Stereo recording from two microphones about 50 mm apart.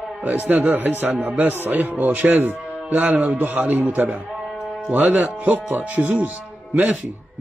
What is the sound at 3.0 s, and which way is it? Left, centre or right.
A man's voice, right.